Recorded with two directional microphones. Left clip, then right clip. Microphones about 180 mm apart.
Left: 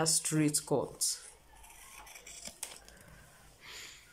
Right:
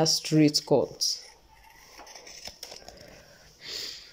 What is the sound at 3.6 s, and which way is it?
Snort, 25° right (ahead or behind).